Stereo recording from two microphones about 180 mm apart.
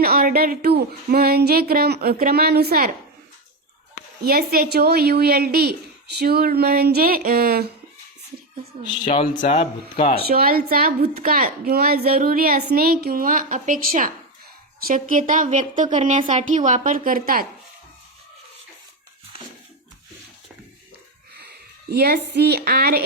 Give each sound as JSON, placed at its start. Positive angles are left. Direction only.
{"t": 0.0, "sound": "a woman's voice", "side_deg": -55}
{"t": 4.2, "sound": "a woman's voice", "side_deg": -55}
{"t": 9.0, "sound": "speech", "side_deg": 45}
{"t": 10.2, "sound": "a woman's voice", "side_deg": -55}
{"t": 21.8, "sound": "a woman's voice", "side_deg": -65}